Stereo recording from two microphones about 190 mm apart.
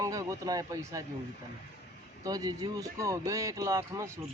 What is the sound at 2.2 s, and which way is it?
Speech, 20° right (ahead or behind).